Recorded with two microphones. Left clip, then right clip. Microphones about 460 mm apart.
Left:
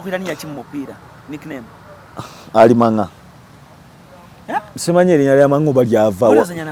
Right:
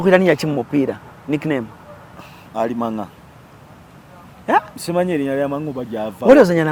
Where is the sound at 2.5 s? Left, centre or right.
Left.